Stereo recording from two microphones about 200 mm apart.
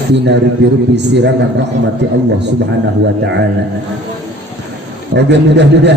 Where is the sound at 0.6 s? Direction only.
60° right (ahead or behind).